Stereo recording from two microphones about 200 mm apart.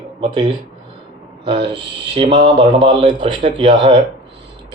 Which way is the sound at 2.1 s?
25° right (ahead or behind).